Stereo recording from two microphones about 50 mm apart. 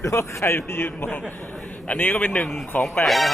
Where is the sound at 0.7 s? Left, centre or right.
Left.